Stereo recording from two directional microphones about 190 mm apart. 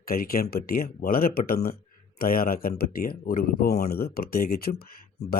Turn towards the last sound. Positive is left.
turn(degrees=50)  # may be behind; listen again after turning